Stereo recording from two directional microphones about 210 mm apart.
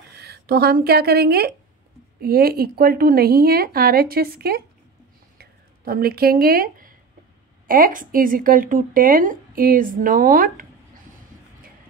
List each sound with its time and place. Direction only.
0.1 s a woman's voice: 50° right (ahead or behind)